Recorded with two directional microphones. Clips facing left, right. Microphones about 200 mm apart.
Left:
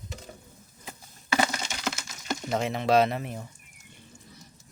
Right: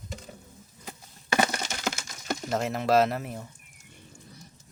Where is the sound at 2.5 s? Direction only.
Centre (ahead or behind).